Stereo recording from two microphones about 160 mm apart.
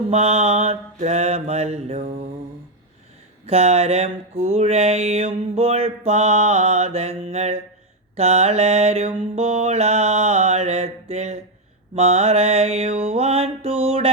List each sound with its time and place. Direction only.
0.1 s mantra: 40° right (ahead or behind)
3.4 s mantra: 40° right (ahead or behind)